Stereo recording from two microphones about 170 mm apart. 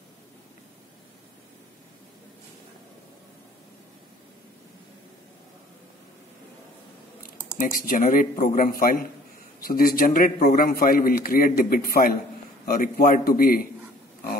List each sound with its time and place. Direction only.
7.6 s a man's voice: 55° left (ahead or behind)